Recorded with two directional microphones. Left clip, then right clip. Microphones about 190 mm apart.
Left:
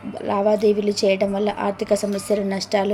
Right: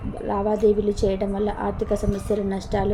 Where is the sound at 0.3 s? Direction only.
15° left (ahead or behind).